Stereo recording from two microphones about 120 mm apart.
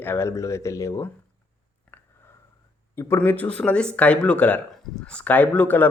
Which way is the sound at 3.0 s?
20° left (ahead or behind).